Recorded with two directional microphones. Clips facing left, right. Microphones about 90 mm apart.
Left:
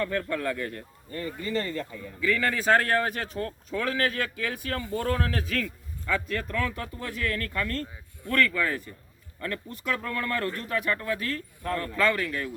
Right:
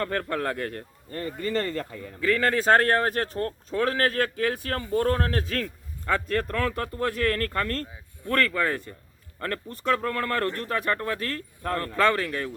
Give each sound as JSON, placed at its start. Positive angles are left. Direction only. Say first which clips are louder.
{"t": 0.0, "sound": "speech", "louder": "right 1 dB", "side_deg": -50}